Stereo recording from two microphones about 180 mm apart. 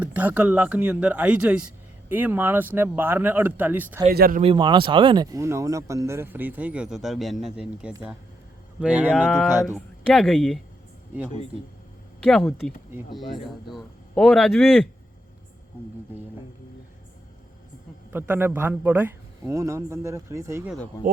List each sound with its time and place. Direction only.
0.0 s a man's voice: 10° right (ahead or behind)
4.1 s speech: 55° right (ahead or behind)
4.4 s a man's voice: 25° right (ahead or behind); by 9.1 s 10° right (ahead or behind)
9.1 s a man's voice: 5° left (ahead or behind)
12.2 s a man's voice: centre (ahead or behind)
18.1 s a man's voice: 10° right (ahead or behind)